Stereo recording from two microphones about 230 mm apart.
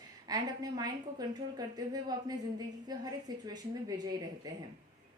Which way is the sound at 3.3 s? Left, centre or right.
Centre.